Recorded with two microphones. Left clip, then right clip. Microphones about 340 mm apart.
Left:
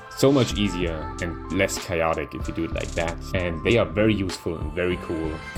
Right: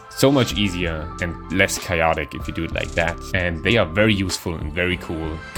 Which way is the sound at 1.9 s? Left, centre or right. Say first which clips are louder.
Right 4 dB; right.